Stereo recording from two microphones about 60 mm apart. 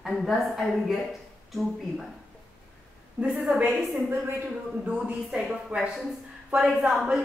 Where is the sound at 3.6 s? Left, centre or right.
Centre.